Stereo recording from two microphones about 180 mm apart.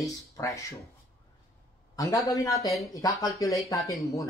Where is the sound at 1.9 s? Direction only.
20° left (ahead or behind).